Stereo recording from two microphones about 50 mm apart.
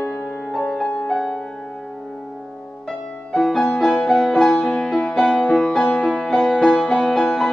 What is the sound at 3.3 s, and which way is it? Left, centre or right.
Music, centre.